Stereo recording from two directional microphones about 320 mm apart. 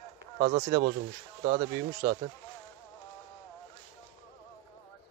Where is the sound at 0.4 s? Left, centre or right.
Right.